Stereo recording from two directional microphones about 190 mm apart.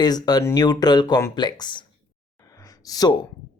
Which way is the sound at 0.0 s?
20° left (ahead or behind).